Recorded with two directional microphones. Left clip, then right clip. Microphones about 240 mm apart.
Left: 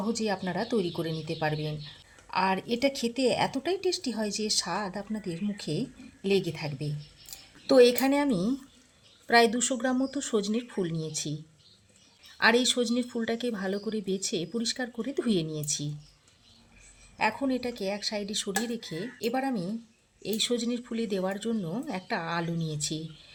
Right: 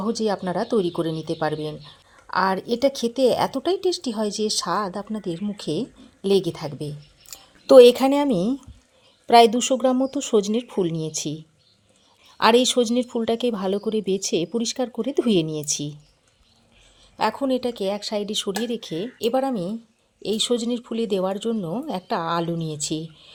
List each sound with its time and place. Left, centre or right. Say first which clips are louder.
0.2 s speech: right 7 dB; centre
17.2 s speech: right 6 dB; right